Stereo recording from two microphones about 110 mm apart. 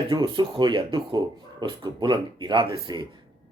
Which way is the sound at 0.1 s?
40° right (ahead or behind).